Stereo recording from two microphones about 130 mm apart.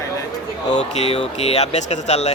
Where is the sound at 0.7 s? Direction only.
60° left (ahead or behind).